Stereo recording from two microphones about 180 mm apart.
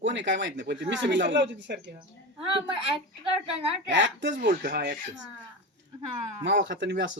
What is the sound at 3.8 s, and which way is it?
Speech, 90° right.